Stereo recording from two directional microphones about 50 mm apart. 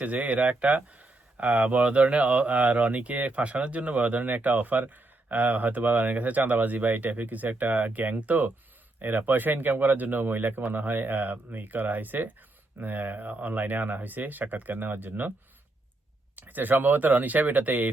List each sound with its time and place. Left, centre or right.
0.0 s speech: right
16.3 s speech: right